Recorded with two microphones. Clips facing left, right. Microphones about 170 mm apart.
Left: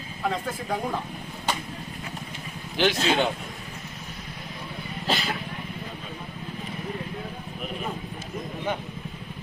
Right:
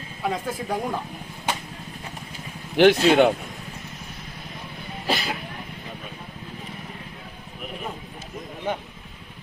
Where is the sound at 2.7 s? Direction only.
60° right (ahead or behind).